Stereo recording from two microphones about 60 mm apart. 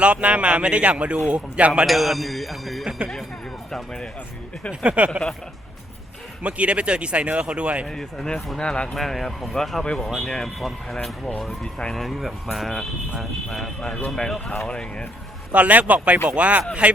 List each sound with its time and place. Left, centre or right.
0.0 s speech: centre
1.9 s speech: centre
4.7 s speech: centre
6.4 s speech: right
7.9 s speech: centre
8.9 s speech: centre
9.8 s speech: centre
10.2 s speech: centre
11.6 s speech: centre
11.9 s speech: centre
15.5 s speech: right